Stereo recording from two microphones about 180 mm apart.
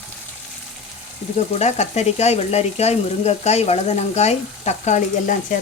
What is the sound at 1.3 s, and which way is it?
Speech, 40° left (ahead or behind).